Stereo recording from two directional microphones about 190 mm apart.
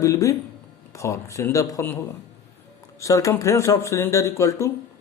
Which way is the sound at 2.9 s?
15° left (ahead or behind).